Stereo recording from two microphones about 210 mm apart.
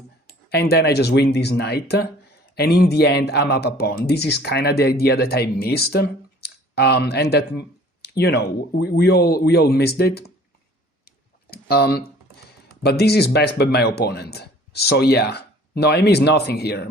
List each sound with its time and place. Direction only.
0.5 s a man's voice: 50° left (ahead or behind)
11.5 s a man's voice: 50° left (ahead or behind)